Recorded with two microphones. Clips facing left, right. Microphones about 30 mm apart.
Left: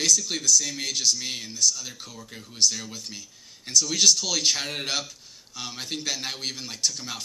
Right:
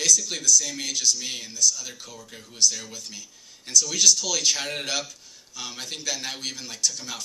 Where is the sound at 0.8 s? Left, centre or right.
Left.